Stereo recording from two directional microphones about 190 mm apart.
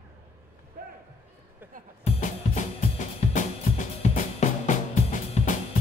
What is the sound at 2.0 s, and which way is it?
Music, 35° left (ahead or behind).